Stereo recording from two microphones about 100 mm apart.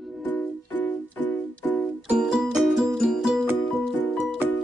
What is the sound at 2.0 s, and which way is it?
Music, 5° right (ahead or behind).